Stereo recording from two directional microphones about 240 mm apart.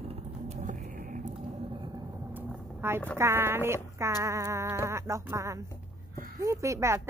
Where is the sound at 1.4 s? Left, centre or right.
Right.